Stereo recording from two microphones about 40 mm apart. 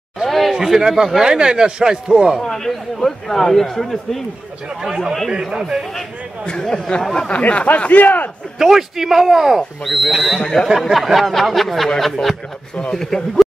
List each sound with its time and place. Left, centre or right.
0.2 s a sound: centre
0.5 s a man's voice: centre
2.4 s a man's voice: centre
4.8 s a man's voice: centre
6.4 s a man's voice: centre
7.2 s speech: left
7.8 s speech: left
8.5 s a man's voice: centre
10.4 s a man's voice: centre
10.9 s a sound: centre
12.9 s a man's voice: centre